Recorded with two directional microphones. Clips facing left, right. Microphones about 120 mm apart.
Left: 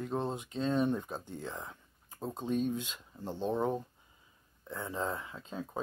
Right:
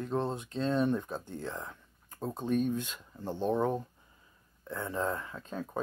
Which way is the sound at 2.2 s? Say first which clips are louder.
Right 3 dB; 5° right (ahead or behind).